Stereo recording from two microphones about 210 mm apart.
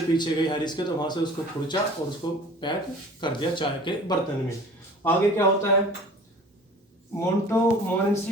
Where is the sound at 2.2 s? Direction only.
20° left (ahead or behind).